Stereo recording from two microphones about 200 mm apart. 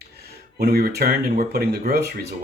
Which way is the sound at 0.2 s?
50° right (ahead or behind).